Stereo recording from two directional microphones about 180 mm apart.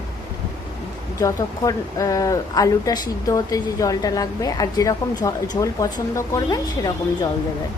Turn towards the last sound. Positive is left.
turn(degrees=20)  # may be behind; listen again after turning